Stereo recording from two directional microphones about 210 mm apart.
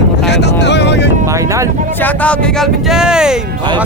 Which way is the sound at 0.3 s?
55° left (ahead or behind).